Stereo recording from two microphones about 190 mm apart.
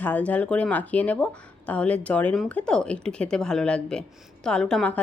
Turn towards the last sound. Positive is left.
turn(degrees=5)  # may be behind; listen again after turning